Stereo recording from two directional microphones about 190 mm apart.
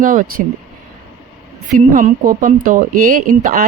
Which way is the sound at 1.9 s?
45° right (ahead or behind).